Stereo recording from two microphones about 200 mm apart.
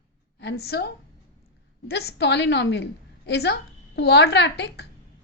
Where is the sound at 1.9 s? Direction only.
55° left (ahead or behind).